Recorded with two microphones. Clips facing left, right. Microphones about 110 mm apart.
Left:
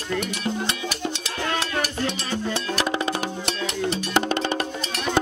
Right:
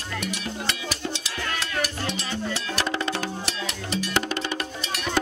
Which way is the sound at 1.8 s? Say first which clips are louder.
Left 2 dB; 50° left (ahead or behind).